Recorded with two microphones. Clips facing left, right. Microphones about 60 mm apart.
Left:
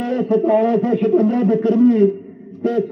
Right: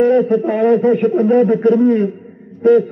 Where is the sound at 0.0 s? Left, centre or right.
Right.